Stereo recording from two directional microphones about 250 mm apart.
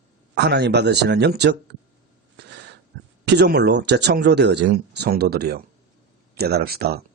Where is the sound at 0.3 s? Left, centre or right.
Right.